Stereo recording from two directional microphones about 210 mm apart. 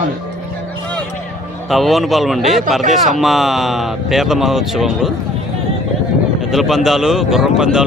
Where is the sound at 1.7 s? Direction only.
Centre (ahead or behind).